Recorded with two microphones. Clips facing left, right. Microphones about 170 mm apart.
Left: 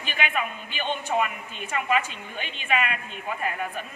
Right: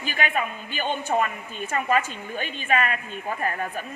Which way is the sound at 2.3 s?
45° right (ahead or behind).